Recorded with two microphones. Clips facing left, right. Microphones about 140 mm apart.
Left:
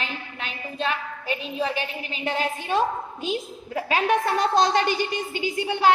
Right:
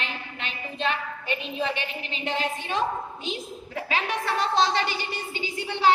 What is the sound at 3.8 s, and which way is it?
A woman's voice, 45° left (ahead or behind).